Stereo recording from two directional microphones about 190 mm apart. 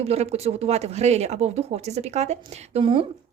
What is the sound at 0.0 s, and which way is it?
Speech, 35° right (ahead or behind).